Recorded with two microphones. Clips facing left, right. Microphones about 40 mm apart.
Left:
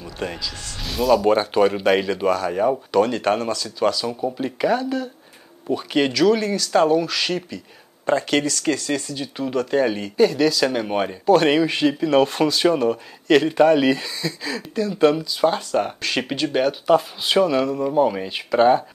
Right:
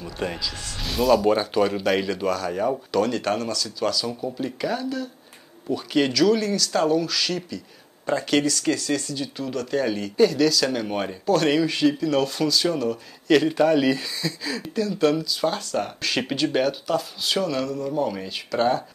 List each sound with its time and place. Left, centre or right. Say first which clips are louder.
0.0 s speech: even; centre
1.2 s speech: left 3 dB; centre
8.2 s speech: left 1 dB; centre; by 13.0 s left
13.6 s speech: left 4 dB; centre
16.8 s speech: left 7 dB; left